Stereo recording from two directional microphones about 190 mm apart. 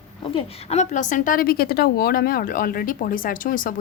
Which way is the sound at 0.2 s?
30° left (ahead or behind).